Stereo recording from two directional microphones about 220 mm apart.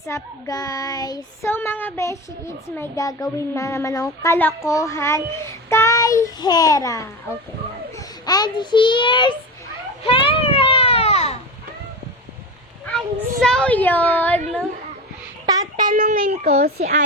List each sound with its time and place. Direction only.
0.0 s a child's voice: 15° left (ahead or behind)
10.0 s baby cry: 25° left (ahead or behind)
13.4 s speech: 5° left (ahead or behind)
15.7 s a child's voice: 35° right (ahead or behind)